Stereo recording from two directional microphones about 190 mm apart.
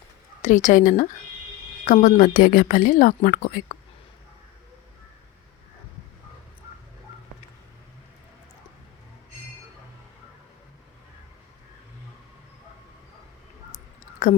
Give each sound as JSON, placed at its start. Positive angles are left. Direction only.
{"t": 0.4, "sound": "a woman's voice", "side_deg": 40}